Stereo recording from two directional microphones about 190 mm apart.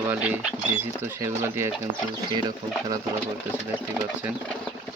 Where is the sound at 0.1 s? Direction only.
5° right (ahead or behind).